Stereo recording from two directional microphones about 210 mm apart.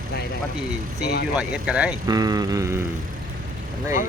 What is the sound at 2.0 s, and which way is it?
Speech, 15° right (ahead or behind).